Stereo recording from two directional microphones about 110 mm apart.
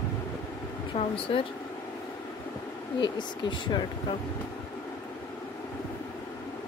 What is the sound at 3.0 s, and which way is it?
Speech, 45° left (ahead or behind).